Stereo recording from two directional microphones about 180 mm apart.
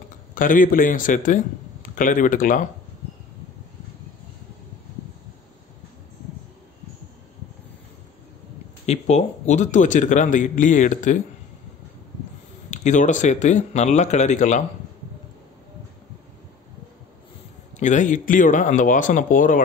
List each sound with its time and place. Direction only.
0.3 s a man's voice: 50° left (ahead or behind)
8.8 s a man's voice: 35° left (ahead or behind)
12.7 s speech: 40° left (ahead or behind)
17.7 s a man's voice: 40° left (ahead or behind)